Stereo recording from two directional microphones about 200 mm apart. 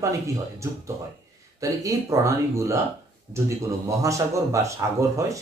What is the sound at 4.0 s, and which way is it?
Speech, 15° right (ahead or behind).